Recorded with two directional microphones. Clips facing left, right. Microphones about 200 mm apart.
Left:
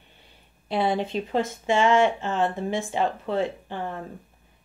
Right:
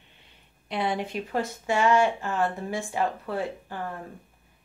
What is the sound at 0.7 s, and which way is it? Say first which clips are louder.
Speech: left 4 dB; 30° left (ahead or behind).